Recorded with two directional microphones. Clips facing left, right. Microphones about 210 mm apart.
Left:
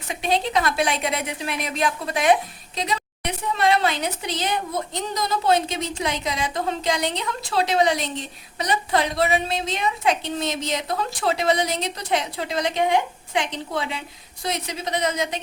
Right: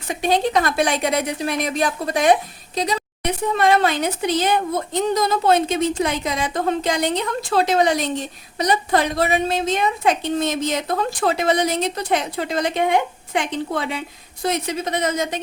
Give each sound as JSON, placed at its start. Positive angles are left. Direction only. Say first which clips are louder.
{"t": 0.1, "sound": "a woman's voice", "louder": "right 4 dB", "side_deg": -45}